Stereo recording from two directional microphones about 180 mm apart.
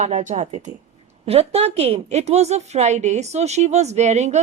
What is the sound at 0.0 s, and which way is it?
A woman's voice, 40° right (ahead or behind).